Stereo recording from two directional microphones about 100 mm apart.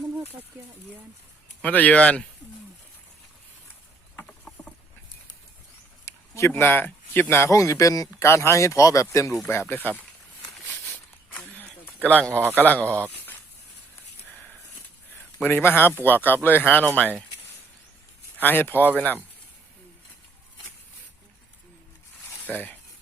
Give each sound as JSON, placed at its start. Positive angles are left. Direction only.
{"t": 1.6, "sound": "speech", "side_deg": 15}
{"t": 6.1, "sound": "speech", "side_deg": 30}
{"t": 11.3, "sound": "a sound", "side_deg": 10}
{"t": 12.0, "sound": "speech", "side_deg": 10}
{"t": 12.3, "sound": "a man's voice", "side_deg": -25}
{"t": 12.5, "sound": "speech", "side_deg": 15}
{"t": 15.4, "sound": "speech", "side_deg": 20}
{"t": 18.3, "sound": "speech", "side_deg": 20}
{"t": 22.4, "sound": "speech", "side_deg": 15}